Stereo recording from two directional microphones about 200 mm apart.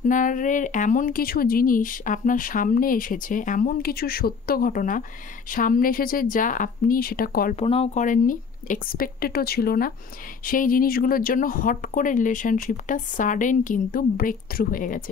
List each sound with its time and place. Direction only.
0.0 s speech: 40° left (ahead or behind)
7.5 s speech: 30° left (ahead or behind)